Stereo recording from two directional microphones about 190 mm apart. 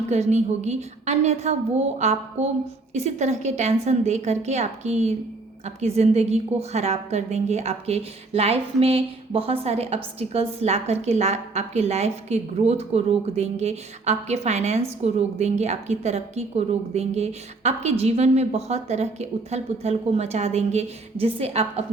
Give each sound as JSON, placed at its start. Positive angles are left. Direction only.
{"t": 0.1, "sound": "a woman's voice", "side_deg": -35}